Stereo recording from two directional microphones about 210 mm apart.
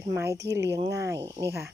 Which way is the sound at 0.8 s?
15° right (ahead or behind).